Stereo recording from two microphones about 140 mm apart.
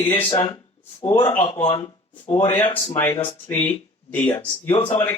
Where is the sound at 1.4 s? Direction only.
45° left (ahead or behind).